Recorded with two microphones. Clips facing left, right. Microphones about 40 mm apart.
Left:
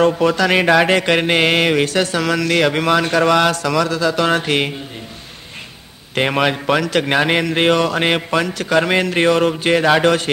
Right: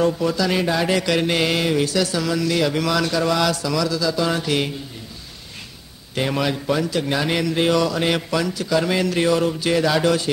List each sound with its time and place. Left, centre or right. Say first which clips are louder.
0.0 s a man's voice: left 5 dB; left
2.8 s a man's voice: left 5 dB; left
6.1 s a man's voice: left 5 dB; left